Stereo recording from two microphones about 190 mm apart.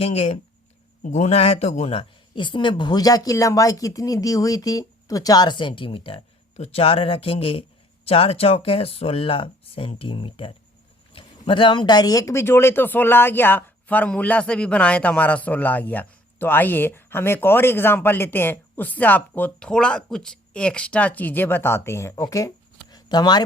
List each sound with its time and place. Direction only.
0.0 s speech: 30° left (ahead or behind)